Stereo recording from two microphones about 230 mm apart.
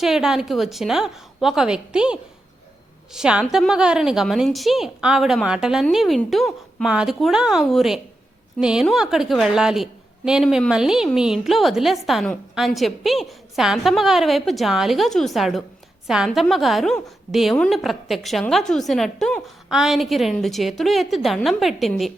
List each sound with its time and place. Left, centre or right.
0.0 s a woman's voice: centre